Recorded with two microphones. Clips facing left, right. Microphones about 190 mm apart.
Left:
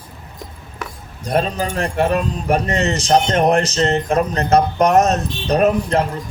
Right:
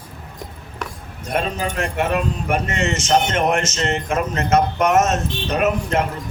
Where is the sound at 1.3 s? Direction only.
35° left (ahead or behind).